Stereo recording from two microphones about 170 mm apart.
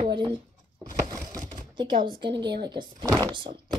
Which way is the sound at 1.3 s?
25° right (ahead or behind).